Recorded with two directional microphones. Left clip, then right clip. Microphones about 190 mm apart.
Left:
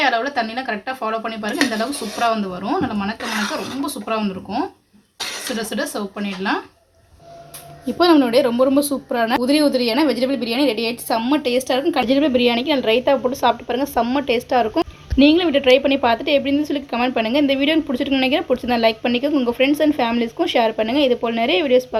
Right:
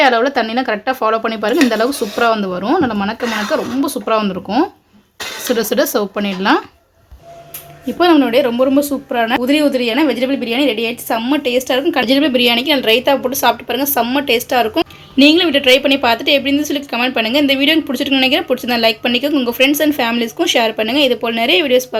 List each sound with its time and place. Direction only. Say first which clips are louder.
0.0 s speech: right 6 dB; 45° right (ahead or behind)
7.9 s a woman's voice: right 3 dB; centre (ahead or behind)